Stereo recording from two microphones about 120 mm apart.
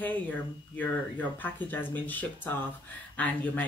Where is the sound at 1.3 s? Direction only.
15° left (ahead or behind).